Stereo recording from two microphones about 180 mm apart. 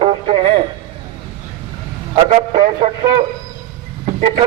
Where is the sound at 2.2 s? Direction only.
35° right (ahead or behind).